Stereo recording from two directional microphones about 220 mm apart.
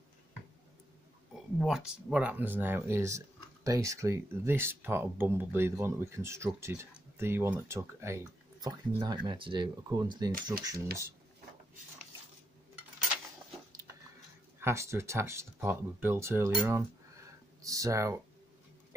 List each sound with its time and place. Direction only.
1.6 s speech: 5° right (ahead or behind); by 10.3 s 20° right (ahead or behind)
14.6 s speech: 10° right (ahead or behind)